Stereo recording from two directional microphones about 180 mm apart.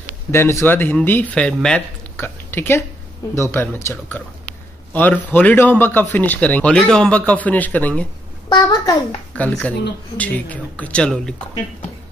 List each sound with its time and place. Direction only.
0.3 s a man's voice: 15° left (ahead or behind)
8.5 s a child's voice: 20° left (ahead or behind)
9.3 s a man's voice: 5° left (ahead or behind)